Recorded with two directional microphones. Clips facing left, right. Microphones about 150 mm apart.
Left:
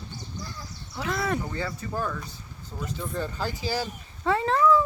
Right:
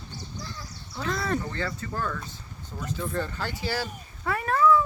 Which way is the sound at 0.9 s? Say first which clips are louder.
Even; 5° left (ahead or behind).